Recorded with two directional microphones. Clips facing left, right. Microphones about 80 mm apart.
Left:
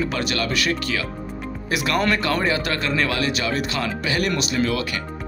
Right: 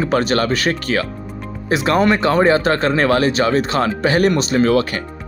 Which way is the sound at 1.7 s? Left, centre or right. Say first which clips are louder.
Right 6 dB; right.